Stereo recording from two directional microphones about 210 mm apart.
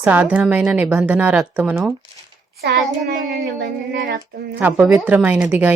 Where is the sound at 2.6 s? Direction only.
50° right (ahead or behind).